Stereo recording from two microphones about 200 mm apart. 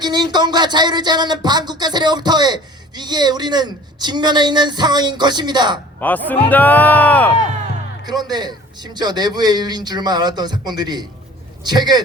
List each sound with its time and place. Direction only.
0.0 s speech: 20° right (ahead or behind)
6.0 s a man's voice: 10° left (ahead or behind)
8.0 s speech: 20° right (ahead or behind)